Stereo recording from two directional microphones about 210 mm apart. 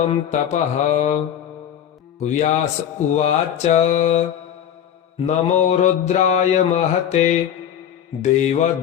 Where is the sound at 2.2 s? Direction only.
35° left (ahead or behind).